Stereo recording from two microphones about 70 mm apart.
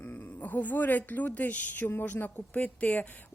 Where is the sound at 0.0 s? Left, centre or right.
Left.